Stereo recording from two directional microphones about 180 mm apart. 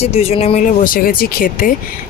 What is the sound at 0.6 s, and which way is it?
Speech, 50° left (ahead or behind).